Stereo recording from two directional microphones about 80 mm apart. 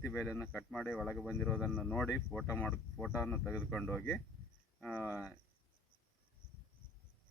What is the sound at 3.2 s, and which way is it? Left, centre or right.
Speech, centre.